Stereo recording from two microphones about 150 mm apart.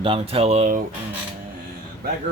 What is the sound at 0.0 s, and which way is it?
Speech, 40° right (ahead or behind).